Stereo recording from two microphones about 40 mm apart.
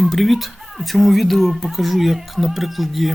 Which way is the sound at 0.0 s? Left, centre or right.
Centre.